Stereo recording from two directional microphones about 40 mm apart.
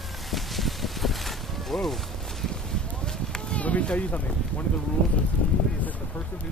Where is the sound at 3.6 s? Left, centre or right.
Left.